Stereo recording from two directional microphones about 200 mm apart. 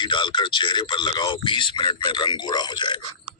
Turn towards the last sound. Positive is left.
turn(degrees=20)  # may be behind; listen again after turning